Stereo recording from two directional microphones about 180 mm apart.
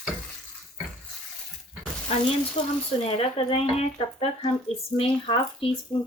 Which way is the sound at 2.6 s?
35° left (ahead or behind).